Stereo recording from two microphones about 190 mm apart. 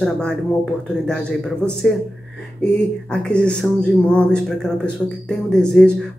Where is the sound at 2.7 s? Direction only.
5° left (ahead or behind).